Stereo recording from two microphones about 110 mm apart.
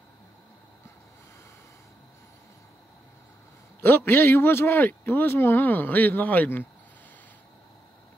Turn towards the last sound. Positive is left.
turn(degrees=15)  # may be behind; listen again after turning